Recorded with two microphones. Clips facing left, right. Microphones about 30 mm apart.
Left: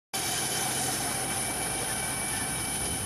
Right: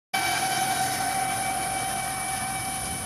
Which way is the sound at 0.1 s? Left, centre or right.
Right.